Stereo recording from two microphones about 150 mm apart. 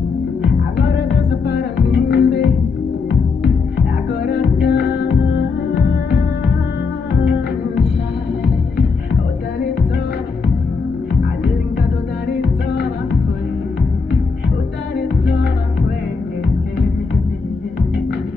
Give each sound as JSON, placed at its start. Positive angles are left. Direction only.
{"t": 2.0, "sound": "music", "side_deg": 90}
{"t": 4.4, "sound": "music", "side_deg": 90}